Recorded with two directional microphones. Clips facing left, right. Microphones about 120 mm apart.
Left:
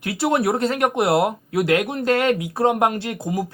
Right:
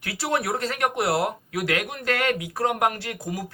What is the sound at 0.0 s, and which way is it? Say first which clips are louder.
Speech: left 6 dB; 25° left (ahead or behind).